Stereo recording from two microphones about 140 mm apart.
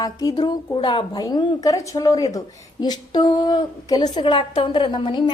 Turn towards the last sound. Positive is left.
turn(degrees=35)  # may be behind; listen again after turning